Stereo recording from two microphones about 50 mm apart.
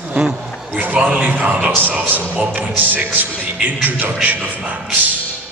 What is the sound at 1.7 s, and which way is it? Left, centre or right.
Speech, right.